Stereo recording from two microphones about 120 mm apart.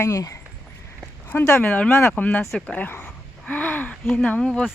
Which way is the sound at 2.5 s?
10° left (ahead or behind).